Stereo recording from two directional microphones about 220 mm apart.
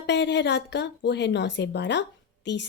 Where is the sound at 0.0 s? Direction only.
50° left (ahead or behind).